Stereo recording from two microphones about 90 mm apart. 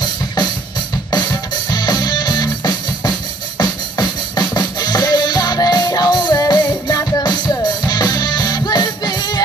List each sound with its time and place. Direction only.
1.1 s music: 50° left (ahead or behind)
7.2 s music: 50° left (ahead or behind)